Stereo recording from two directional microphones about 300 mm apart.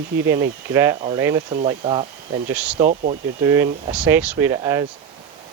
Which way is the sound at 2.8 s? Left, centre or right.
Right.